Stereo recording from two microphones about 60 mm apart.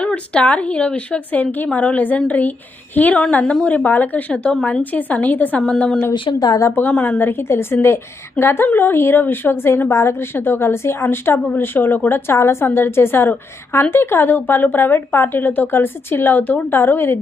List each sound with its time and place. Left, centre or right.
0.0 s a woman's voice: centre
7.2 s a woman's voice: left
9.9 s a woman's voice: left
10.3 s speech: left
12.4 s a woman's voice: left
12.6 s speech: left